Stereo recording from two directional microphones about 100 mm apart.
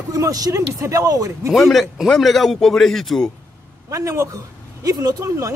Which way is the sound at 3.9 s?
30° right (ahead or behind).